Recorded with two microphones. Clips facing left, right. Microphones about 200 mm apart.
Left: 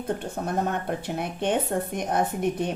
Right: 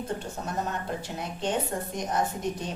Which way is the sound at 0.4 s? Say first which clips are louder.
Left 6 dB; 60° left (ahead or behind).